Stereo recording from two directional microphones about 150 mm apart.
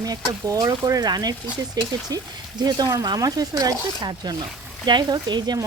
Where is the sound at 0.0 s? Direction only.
25° right (ahead or behind).